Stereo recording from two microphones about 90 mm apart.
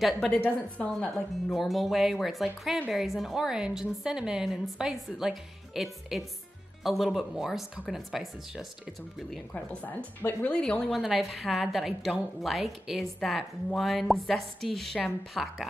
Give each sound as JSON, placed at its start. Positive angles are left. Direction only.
{"t": 0.3, "sound": "speech", "side_deg": 15}
{"t": 1.1, "sound": "a woman's voice", "side_deg": 0}
{"t": 9.5, "sound": "speech", "side_deg": 20}
{"t": 10.6, "sound": "a woman's voice", "side_deg": 5}